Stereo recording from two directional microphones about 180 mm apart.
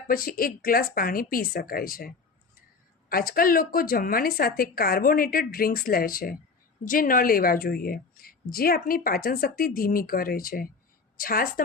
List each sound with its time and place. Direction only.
0.1 s a woman's voice: 55° left (ahead or behind)